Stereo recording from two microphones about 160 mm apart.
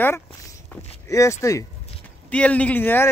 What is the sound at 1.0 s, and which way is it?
Speech, 20° left (ahead or behind).